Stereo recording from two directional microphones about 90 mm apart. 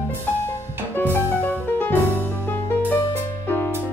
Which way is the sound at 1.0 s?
20° left (ahead or behind).